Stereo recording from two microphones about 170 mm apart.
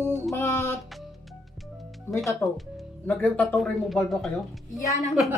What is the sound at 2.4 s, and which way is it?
Speech, centre (ahead or behind).